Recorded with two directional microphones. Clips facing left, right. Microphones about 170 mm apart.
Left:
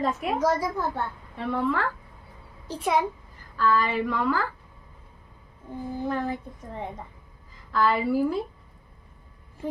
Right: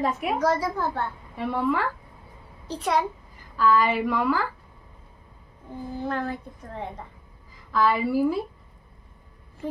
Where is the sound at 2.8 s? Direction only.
10° left (ahead or behind).